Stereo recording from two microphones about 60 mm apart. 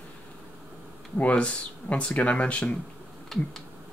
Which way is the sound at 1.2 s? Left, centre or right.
Left.